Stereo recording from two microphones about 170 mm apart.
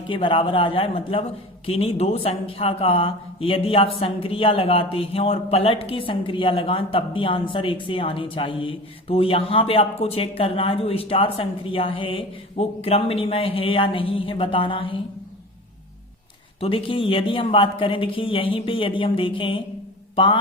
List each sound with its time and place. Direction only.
0.1 s speech: 30° left (ahead or behind)
16.6 s speech: 30° left (ahead or behind)
20.1 s mantra: 30° left (ahead or behind)